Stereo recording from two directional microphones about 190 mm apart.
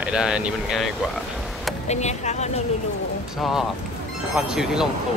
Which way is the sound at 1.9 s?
35° left (ahead or behind).